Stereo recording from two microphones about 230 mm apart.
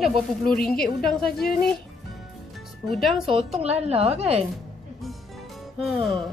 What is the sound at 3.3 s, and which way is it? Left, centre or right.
A woman's voice, right.